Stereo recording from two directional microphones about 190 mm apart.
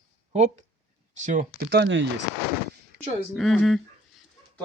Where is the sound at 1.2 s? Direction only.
40° right (ahead or behind).